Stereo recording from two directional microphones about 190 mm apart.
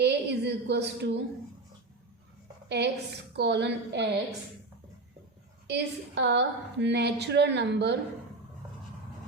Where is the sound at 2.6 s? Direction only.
65° right (ahead or behind).